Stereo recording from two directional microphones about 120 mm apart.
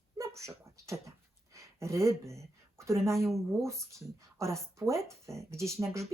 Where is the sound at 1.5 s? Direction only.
25° right (ahead or behind).